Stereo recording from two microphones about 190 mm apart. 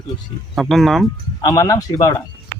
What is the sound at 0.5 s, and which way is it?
Speech, centre (ahead or behind).